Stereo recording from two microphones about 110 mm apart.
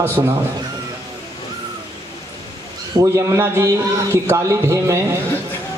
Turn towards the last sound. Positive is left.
turn(degrees=-30)  # may be behind; listen again after turning